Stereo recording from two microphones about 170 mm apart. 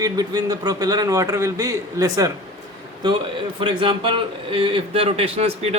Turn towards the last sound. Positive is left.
turn(degrees=-40)  # may be behind; listen again after turning